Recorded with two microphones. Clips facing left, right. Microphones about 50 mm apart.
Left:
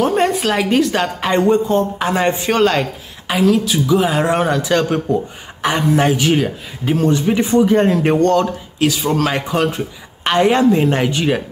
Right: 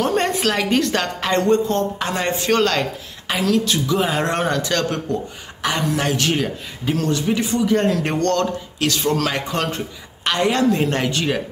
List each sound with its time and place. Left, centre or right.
0.0 s a woman's voice: centre
6.8 s a woman's voice: left
10.2 s a woman's voice: left